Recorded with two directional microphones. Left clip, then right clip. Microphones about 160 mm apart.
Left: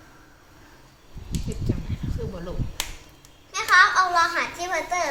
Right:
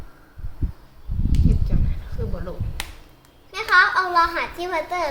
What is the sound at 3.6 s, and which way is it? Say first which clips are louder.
A child's voice: even; 45° right (ahead or behind).